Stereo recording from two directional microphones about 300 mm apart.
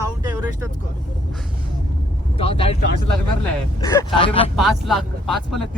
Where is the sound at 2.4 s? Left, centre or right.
Centre.